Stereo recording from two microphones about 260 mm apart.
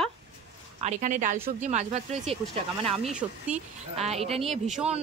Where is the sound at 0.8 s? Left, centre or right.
Right.